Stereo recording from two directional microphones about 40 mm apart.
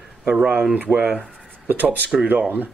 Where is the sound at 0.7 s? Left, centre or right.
Right.